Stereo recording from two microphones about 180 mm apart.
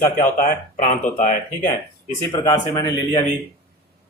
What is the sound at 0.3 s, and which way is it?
Speech, 45° left (ahead or behind).